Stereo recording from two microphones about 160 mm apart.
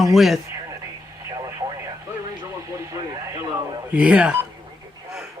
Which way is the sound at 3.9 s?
10° right (ahead or behind).